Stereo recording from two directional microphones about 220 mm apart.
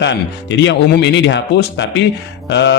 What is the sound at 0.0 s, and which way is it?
A man's voice, 55° left (ahead or behind).